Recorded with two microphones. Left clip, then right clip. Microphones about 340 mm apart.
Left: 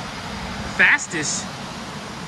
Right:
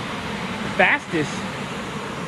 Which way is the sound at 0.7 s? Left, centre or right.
Centre.